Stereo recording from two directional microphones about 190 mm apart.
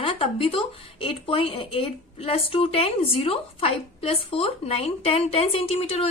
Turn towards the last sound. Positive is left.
turn(degrees=30)  # may be behind; listen again after turning